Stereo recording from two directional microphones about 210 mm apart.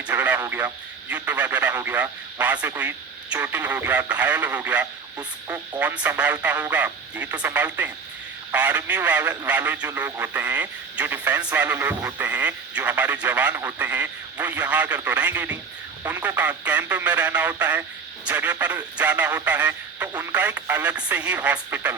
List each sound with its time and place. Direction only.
0.1 s a man's voice: 10° right (ahead or behind)
5.1 s a man's voice: 15° right (ahead or behind)
5.8 s a man's voice: 5° right (ahead or behind)